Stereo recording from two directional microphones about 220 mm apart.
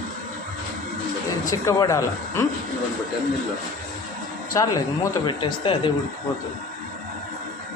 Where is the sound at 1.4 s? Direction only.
15° left (ahead or behind).